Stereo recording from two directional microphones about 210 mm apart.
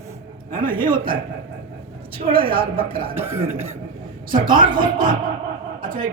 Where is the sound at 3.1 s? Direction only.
10° right (ahead or behind).